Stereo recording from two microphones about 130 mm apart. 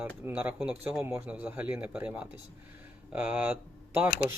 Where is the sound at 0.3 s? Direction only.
10° right (ahead or behind).